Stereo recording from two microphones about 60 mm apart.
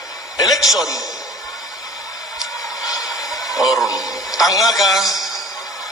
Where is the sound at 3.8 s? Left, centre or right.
Left.